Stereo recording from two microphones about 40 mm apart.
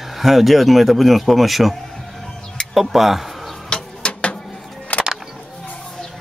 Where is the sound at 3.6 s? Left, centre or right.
Left.